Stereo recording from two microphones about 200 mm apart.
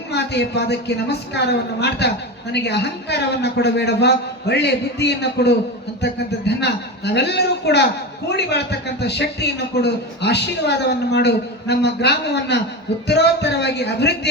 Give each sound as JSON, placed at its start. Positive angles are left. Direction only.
{"t": 0.1, "sound": "a woman's voice", "side_deg": 55}